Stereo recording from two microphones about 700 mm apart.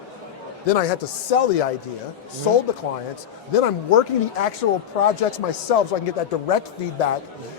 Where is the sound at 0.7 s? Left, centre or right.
Left.